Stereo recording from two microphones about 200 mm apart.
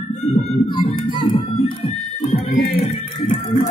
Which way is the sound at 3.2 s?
25° left (ahead or behind).